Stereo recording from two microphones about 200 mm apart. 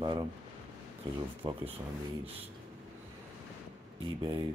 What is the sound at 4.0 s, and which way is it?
Speech, 20° right (ahead or behind).